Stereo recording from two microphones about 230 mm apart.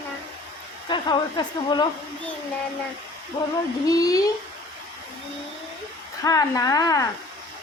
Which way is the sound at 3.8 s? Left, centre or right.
Centre.